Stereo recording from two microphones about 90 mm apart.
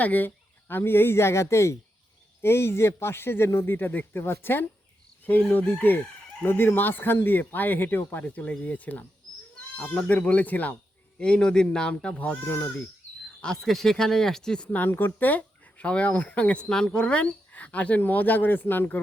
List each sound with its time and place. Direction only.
0.0 s speech: 20° left (ahead or behind)
13.4 s speech: 5° left (ahead or behind); by 18.9 s 20° left (ahead or behind)